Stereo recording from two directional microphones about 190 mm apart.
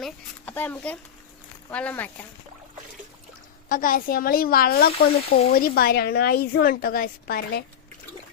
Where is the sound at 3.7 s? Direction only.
45° left (ahead or behind).